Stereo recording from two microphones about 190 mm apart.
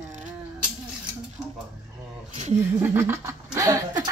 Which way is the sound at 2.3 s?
35° right (ahead or behind).